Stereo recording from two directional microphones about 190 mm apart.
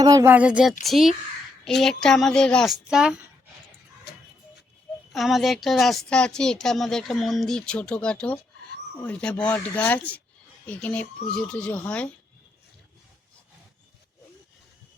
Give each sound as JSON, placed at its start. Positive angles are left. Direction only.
{"t": 0.0, "sound": "speech", "side_deg": -20}
{"t": 0.3, "sound": "speech", "side_deg": -5}
{"t": 4.1, "sound": "a sound", "side_deg": 60}
{"t": 5.1, "sound": "speech", "side_deg": 0}